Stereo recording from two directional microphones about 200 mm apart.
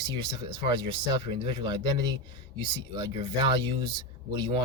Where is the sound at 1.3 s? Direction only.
25° right (ahead or behind).